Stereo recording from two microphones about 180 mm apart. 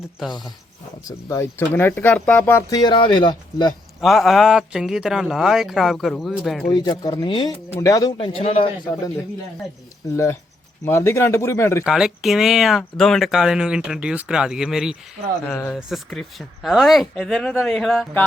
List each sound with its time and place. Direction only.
1.0 s speech: 15° left (ahead or behind)
4.0 s speech: centre (ahead or behind)
6.7 s speech: 25° left (ahead or behind)
8.4 s speech: 30° left (ahead or behind)
10.0 s speech: 15° left (ahead or behind)
11.9 s speech: centre (ahead or behind)